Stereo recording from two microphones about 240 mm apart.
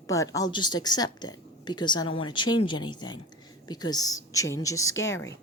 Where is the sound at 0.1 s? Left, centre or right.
Centre.